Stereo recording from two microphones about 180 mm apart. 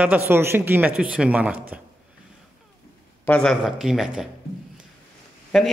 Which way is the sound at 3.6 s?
Centre (ahead or behind).